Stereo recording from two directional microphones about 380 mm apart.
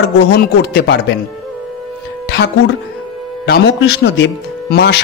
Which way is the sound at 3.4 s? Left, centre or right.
Left.